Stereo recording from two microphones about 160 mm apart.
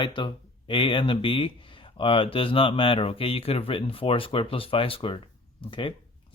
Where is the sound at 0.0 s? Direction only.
30° left (ahead or behind).